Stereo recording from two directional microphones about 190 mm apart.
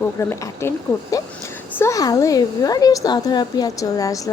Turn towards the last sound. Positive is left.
turn(degrees=20)  # may be behind; listen again after turning